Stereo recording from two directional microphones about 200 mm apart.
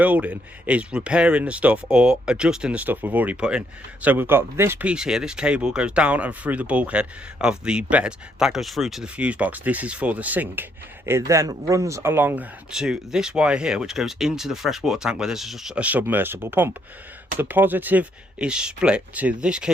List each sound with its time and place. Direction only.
0.0 s speech: 5° right (ahead or behind)